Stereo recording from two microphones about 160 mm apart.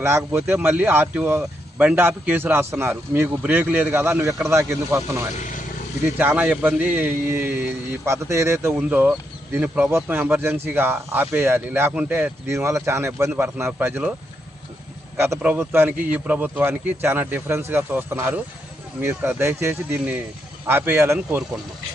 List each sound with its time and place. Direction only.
0.0 s speech: 15° right (ahead or behind)
15.4 s speech: 10° right (ahead or behind)